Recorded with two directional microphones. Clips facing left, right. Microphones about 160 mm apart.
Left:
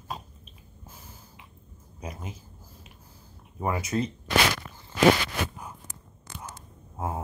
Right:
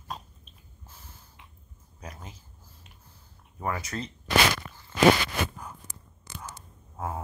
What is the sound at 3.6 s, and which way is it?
Speech, 15° left (ahead or behind).